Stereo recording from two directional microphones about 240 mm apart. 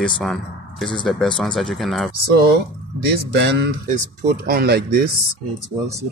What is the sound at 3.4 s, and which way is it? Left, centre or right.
Speech, right.